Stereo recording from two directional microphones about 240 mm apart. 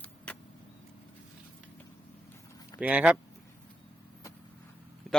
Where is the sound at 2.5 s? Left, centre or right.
Centre.